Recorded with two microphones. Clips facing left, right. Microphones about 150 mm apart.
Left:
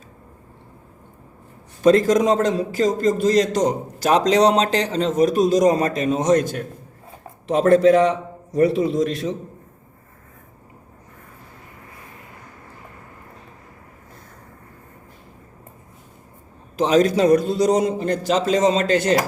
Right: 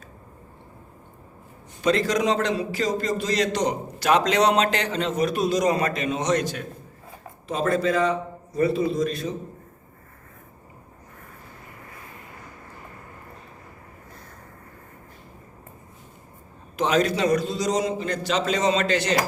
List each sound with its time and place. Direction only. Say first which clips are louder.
1.8 s a man's voice: left 7 dB; 45° left (ahead or behind)
7.7 s a man's voice: left 8 dB; 70° left (ahead or behind)
8.5 s a man's voice: left 4 dB; 85° left
16.7 s a man's voice: left 5 dB; 35° left (ahead or behind)